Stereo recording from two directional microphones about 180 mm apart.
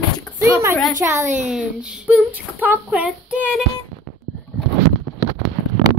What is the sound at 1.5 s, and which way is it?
Child singing, 5° right (ahead or behind).